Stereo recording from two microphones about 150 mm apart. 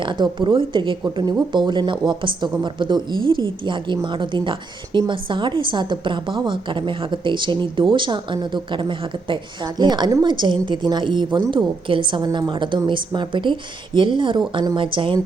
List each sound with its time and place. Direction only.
0.0 s speech: 30° right (ahead or behind)